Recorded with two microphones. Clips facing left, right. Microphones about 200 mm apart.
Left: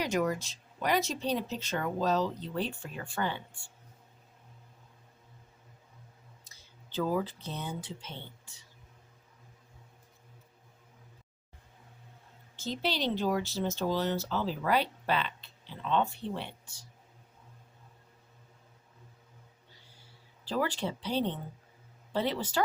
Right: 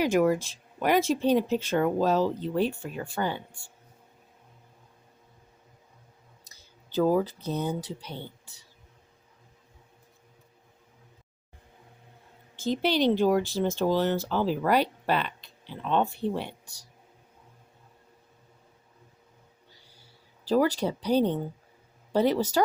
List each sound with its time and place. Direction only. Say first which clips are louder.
0.0 s speech: right 7 dB; 50° right (ahead or behind)
3.0 s speech: right 4 dB; 40° right (ahead or behind)
6.5 s speech: right 10 dB; 40° right (ahead or behind)
12.5 s speech: right 8 dB; 55° right (ahead or behind)
20.4 s speech: right 8 dB; 40° right (ahead or behind)